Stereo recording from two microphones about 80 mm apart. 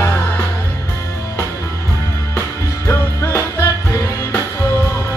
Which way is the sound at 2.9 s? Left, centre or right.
Left.